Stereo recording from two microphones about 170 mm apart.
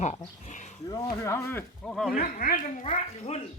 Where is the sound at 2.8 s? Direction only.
35° left (ahead or behind).